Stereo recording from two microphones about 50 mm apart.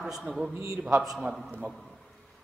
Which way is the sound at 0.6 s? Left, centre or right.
Right.